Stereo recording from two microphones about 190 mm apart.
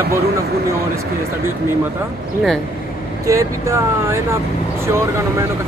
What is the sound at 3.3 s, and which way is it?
Speech, 15° right (ahead or behind).